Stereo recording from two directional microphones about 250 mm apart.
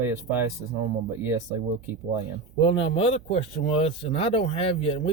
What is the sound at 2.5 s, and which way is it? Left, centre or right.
Speech, left.